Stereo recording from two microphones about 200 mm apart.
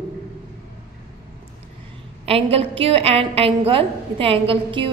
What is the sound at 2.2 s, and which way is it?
A woman's voice, 30° right (ahead or behind).